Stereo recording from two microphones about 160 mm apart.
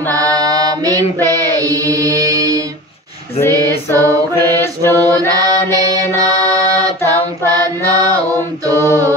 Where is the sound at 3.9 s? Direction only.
20° right (ahead or behind).